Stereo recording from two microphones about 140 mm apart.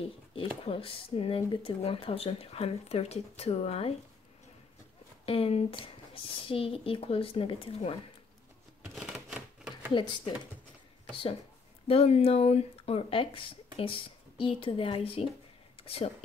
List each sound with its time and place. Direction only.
0.0 s a sound: 40° left (ahead or behind)
0.7 s speech: 40° left (ahead or behind)
5.2 s speech: 45° left (ahead or behind)
8.9 s typewriter: 5° right (ahead or behind)
9.9 s speech: 35° left (ahead or behind)
11.9 s speech: 45° left (ahead or behind)